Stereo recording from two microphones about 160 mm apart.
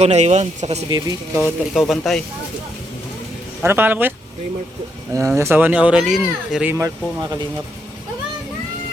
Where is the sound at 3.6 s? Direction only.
15° right (ahead or behind).